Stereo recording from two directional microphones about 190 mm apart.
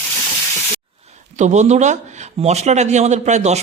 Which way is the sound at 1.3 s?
40° right (ahead or behind).